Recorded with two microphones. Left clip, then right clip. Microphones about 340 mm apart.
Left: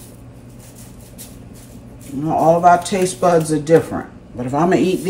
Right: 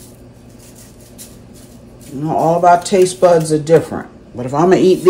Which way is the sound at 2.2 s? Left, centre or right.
Centre.